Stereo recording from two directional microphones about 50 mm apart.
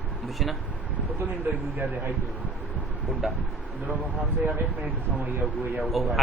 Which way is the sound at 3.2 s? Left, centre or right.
Centre.